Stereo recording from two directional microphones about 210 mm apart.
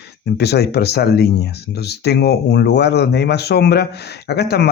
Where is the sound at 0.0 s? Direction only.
50° left (ahead or behind).